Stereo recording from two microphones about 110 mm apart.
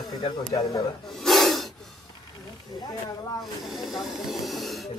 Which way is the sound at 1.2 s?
Centre (ahead or behind).